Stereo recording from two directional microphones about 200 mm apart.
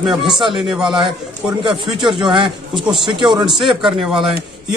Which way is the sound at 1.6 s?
25° right (ahead or behind).